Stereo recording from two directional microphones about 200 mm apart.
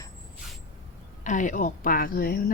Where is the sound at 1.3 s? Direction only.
40° left (ahead or behind).